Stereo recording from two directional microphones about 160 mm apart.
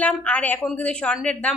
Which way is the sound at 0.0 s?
10° left (ahead or behind).